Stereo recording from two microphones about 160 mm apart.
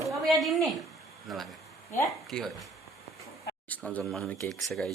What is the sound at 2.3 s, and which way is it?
Speech, 5° left (ahead or behind).